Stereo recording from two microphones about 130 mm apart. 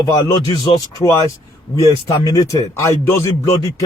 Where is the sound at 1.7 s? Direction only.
25° left (ahead or behind).